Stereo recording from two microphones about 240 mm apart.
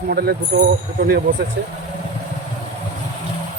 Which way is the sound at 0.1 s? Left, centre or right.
Right.